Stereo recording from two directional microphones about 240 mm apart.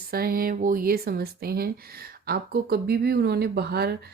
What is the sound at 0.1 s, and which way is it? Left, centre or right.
Speech, right.